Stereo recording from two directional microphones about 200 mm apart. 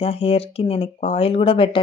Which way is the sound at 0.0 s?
30° left (ahead or behind).